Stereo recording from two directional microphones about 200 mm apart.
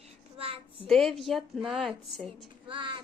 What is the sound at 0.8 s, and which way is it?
A woman's voice, centre (ahead or behind).